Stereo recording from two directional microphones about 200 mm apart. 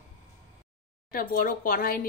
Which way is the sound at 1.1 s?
45° left (ahead or behind).